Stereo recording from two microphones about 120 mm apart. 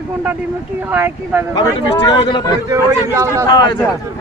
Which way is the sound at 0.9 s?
20° right (ahead or behind).